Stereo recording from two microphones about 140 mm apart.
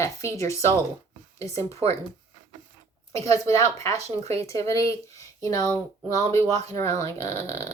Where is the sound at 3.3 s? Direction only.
25° left (ahead or behind).